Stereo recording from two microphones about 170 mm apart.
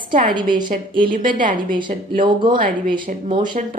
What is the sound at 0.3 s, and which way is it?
Speech, 25° right (ahead or behind).